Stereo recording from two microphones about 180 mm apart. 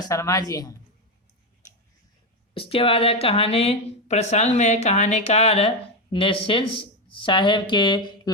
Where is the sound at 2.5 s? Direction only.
30° left (ahead or behind).